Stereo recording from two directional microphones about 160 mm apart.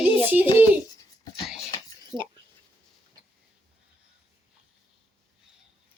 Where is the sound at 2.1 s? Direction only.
5° right (ahead or behind).